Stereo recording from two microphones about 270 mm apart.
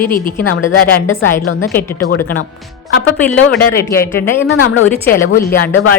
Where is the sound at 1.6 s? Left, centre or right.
Centre.